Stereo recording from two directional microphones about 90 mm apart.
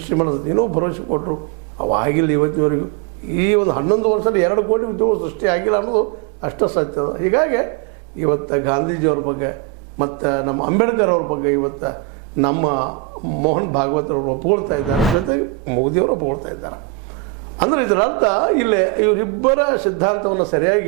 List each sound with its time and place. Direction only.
0.1 s a man's voice: 25° right (ahead or behind)
14.9 s speech: centre (ahead or behind)
15.7 s a man's voice: 30° right (ahead or behind)